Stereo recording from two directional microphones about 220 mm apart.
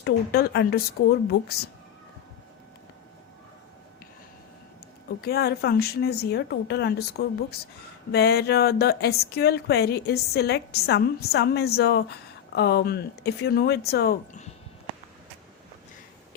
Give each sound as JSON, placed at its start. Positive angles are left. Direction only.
{"t": 0.0, "sound": "speech", "side_deg": 45}
{"t": 5.0, "sound": "speech", "side_deg": 45}